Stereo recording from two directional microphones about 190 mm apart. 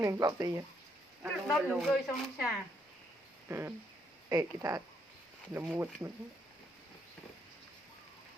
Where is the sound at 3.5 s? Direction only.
10° right (ahead or behind).